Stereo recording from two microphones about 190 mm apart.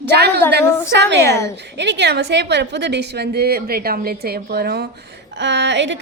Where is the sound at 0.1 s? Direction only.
60° right (ahead or behind).